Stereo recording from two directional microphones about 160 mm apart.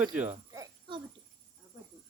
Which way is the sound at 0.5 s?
20° right (ahead or behind).